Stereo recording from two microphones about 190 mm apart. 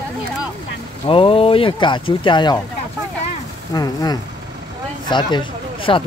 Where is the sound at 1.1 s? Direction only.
30° left (ahead or behind).